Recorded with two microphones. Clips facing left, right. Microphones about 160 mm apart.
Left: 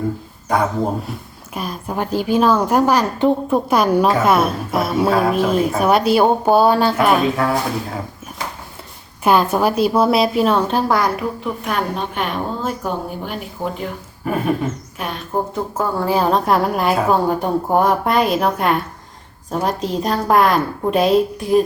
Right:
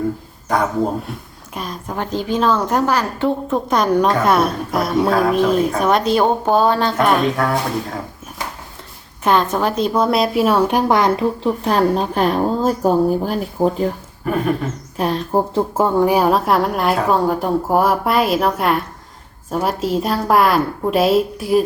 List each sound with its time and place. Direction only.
1.5 s a woman's voice: 10° left (ahead or behind)
9.2 s a woman's voice: 10° left (ahead or behind); by 13.8 s 35° right (ahead or behind)
14.3 s a woman's voice: 5° left (ahead or behind)
14.9 s a woman's voice: 35° right (ahead or behind)
16.0 s a woman's voice: 15° right (ahead or behind)